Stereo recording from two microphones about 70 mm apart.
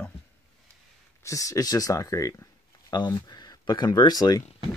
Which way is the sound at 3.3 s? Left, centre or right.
Left.